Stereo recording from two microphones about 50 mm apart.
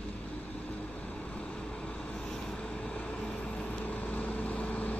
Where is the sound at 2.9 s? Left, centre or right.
Left.